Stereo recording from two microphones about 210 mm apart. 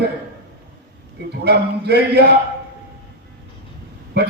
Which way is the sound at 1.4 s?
50° right (ahead or behind).